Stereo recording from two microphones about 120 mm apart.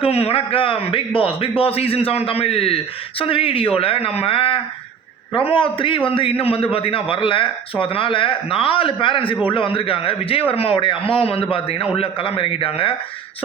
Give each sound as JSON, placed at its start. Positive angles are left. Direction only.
{"t": 0.0, "sound": "a man's voice", "side_deg": 55}